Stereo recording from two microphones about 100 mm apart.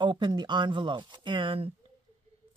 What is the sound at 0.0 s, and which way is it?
Speech, 50° right (ahead or behind).